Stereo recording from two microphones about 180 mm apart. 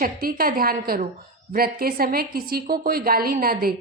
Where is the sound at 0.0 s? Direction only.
55° right (ahead or behind).